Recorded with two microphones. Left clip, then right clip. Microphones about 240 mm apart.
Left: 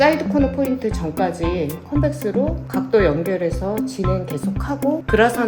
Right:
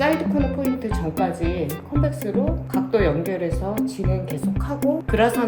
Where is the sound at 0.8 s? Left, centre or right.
Left.